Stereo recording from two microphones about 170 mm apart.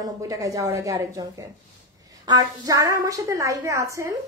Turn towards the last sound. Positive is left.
turn(degrees=-20)  # may be behind; listen again after turning